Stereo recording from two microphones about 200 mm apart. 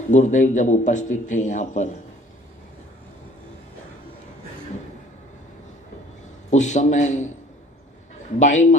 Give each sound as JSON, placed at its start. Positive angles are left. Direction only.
{"t": 0.1, "sound": "a man's voice", "side_deg": 35}
{"t": 6.5, "sound": "a man's voice", "side_deg": 35}
{"t": 8.4, "sound": "a man's voice", "side_deg": 35}